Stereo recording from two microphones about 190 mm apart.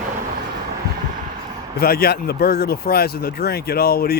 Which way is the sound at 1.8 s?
55° left (ahead or behind).